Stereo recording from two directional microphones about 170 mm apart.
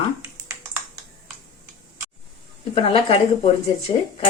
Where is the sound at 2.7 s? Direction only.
35° left (ahead or behind).